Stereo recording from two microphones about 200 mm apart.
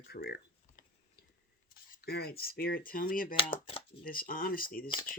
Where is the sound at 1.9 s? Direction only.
50° left (ahead or behind).